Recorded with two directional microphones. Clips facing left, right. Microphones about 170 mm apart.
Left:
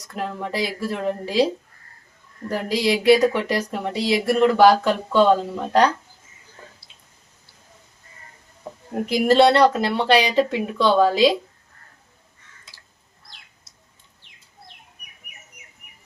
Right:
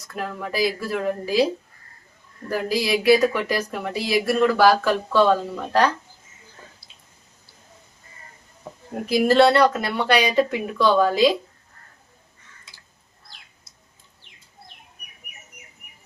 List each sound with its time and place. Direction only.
0.1 s speech: 25° left (ahead or behind)
2.5 s speech: 20° left (ahead or behind)
9.0 s speech: 20° left (ahead or behind)